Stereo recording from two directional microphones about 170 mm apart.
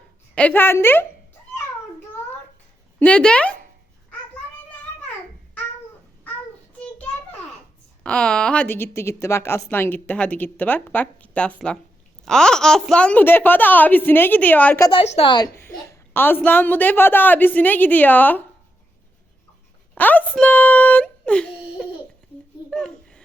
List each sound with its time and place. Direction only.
0.3 s a woman's voice: 10° left (ahead or behind)
3.0 s a woman's voice: 5° left (ahead or behind)
8.0 s a woman's voice: 5° left (ahead or behind)
14.8 s a woman's voice: 35° left (ahead or behind)
15.5 s a woman's voice: 15° left (ahead or behind)
20.0 s speech: 10° left (ahead or behind)
22.7 s a sound: 5° left (ahead or behind)